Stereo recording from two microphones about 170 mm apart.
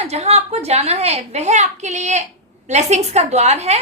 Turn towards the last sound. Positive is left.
turn(degrees=-40)  # may be behind; listen again after turning